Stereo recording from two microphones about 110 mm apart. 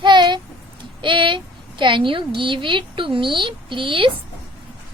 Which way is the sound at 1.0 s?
50° right (ahead or behind).